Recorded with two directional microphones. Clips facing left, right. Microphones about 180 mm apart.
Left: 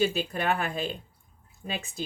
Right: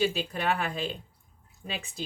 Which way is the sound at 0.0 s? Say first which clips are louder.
Left 1 dB; 45° left (ahead or behind).